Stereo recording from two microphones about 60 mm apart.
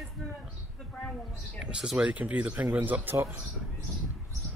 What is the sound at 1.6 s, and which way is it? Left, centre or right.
Speech, centre.